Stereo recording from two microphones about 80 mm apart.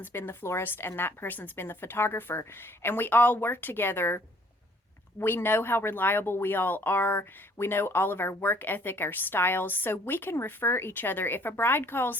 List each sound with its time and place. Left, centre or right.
0.0 s speech: left
5.2 s speech: left